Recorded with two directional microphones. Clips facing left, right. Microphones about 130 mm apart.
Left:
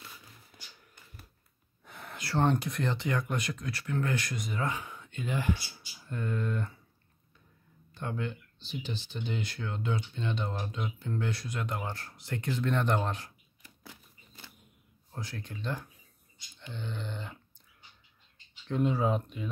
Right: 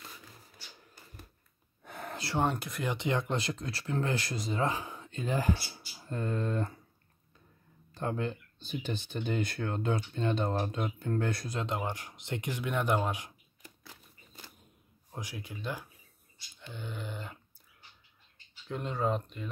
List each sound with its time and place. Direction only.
0.3 s a sound: 35° right (ahead or behind)
1.8 s gasp: 55° right (ahead or behind)
2.3 s speech: 5° right (ahead or behind)
2.9 s speech: 20° right (ahead or behind)
7.9 s speech: 35° right (ahead or behind)
11.5 s speech: 25° right (ahead or behind)
15.0 s speech: 15° right (ahead or behind)
18.7 s speech: 5° left (ahead or behind)